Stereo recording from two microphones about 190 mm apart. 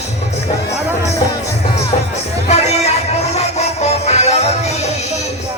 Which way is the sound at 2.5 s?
35° left (ahead or behind).